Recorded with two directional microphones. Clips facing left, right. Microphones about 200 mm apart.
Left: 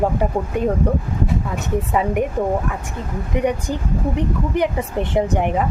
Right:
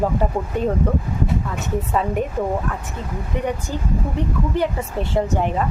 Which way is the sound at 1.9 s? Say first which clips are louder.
Left 2 dB; 15° left (ahead or behind).